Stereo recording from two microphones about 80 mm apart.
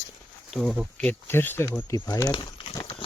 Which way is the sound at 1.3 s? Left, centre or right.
Left.